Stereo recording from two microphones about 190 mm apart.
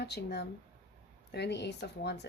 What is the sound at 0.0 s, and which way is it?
Speech, 60° left (ahead or behind).